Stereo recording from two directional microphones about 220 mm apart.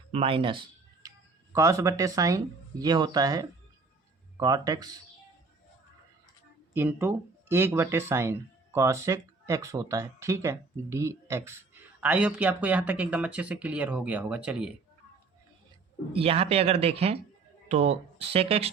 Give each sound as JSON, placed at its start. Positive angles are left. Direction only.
{"t": 0.1, "sound": "speech", "side_deg": -25}
{"t": 6.7, "sound": "speech", "side_deg": -10}
{"t": 16.1, "sound": "speech", "side_deg": -25}